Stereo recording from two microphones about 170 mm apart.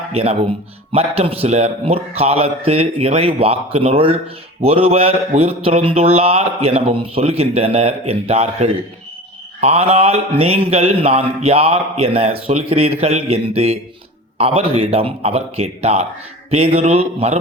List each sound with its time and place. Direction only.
0.1 s speech: 35° right (ahead or behind)